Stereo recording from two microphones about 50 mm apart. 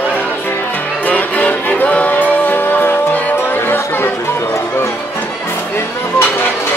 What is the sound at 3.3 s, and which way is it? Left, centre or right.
Music, left.